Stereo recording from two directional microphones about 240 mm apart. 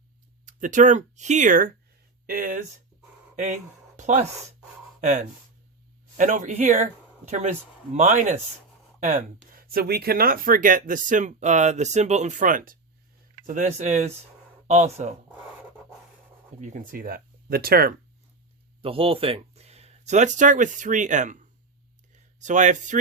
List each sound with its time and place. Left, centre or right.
0.4 s speech: right
3.9 s a sound: right
4.9 s speech: right
16.6 s speech: right
18.8 s speech: right